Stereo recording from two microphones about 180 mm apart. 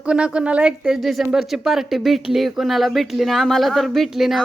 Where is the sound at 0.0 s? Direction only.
5° right (ahead or behind).